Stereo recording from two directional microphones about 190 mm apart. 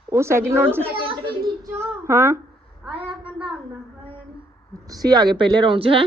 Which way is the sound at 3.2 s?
5° right (ahead or behind).